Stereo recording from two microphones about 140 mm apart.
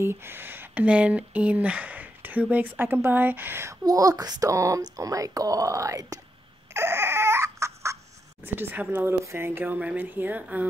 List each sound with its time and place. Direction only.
0.0 s speech: 15° right (ahead or behind)
6.7 s crying: 15° right (ahead or behind)
8.5 s speech: 15° right (ahead or behind)